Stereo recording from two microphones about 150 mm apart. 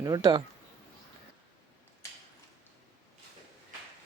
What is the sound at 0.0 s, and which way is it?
Speech, 25° right (ahead or behind).